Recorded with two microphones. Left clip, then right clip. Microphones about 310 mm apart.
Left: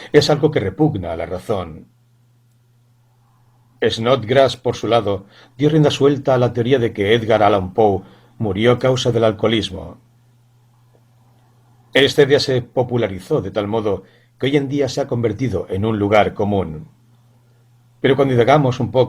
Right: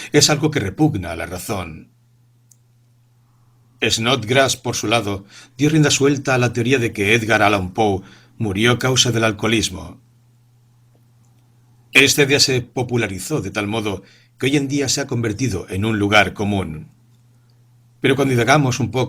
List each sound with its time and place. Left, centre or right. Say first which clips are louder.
0.0 s speech: left 2 dB; right
3.9 s speech: left 2 dB; right
12.1 s speech: left 2 dB; right
18.2 s speech: left 3 dB; right